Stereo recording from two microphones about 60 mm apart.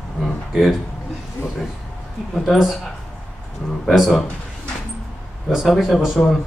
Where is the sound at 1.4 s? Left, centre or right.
Left.